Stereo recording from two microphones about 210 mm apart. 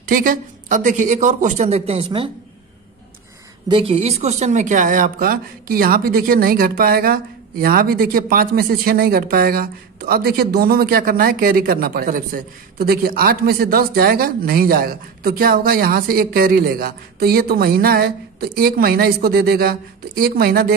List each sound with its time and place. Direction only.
0.1 s speech: 40° right (ahead or behind); by 2.3 s 25° right (ahead or behind)
3.6 s a woman's voice: 25° right (ahead or behind); by 20.7 s 45° right (ahead or behind)